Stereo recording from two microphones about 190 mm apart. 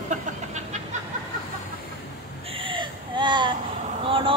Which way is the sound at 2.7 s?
25° right (ahead or behind).